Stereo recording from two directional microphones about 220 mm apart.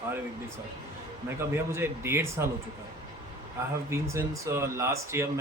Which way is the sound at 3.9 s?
15° right (ahead or behind).